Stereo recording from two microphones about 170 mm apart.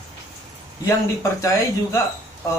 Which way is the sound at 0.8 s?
20° left (ahead or behind).